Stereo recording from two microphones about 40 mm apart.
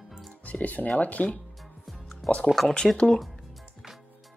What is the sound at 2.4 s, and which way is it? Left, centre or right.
Speech, centre.